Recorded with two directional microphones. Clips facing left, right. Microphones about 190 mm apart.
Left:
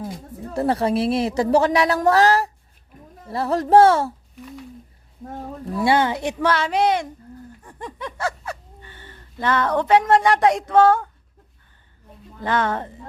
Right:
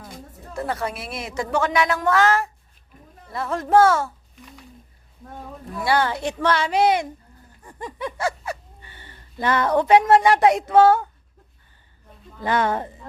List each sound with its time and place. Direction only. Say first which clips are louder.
0.5 s speech: left 7 dB; 35° left (ahead or behind)
5.7 s speech: left 3 dB; 25° left (ahead or behind)
6.4 s speech: right 1 dB; centre (ahead or behind)
12.4 s speech: even; 10° right (ahead or behind)